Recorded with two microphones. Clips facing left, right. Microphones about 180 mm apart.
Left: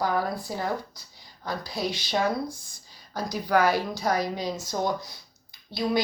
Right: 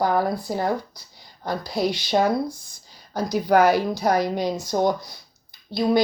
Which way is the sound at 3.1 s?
65° right (ahead or behind).